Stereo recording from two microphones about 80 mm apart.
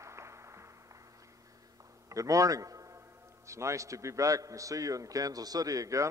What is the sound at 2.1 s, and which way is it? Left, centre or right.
A man's voice, right.